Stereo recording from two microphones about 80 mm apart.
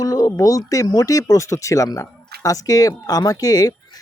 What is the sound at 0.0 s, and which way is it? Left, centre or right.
Speech, left.